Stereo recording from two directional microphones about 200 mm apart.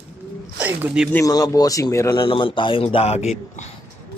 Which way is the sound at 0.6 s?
10° right (ahead or behind).